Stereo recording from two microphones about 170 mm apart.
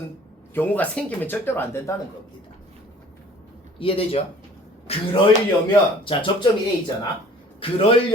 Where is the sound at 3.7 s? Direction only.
35° left (ahead or behind).